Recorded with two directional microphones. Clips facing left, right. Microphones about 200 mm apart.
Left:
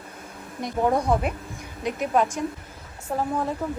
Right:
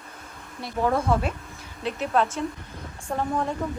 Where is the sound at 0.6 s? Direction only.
20° left (ahead or behind).